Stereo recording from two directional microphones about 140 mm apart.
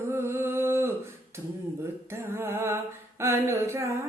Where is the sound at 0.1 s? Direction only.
20° right (ahead or behind).